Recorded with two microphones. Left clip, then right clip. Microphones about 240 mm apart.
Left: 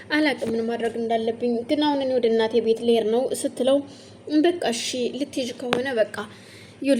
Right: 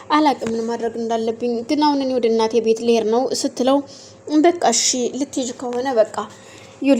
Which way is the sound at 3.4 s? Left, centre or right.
Right.